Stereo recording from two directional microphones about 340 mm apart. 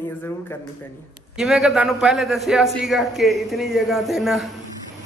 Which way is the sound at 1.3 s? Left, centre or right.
Centre.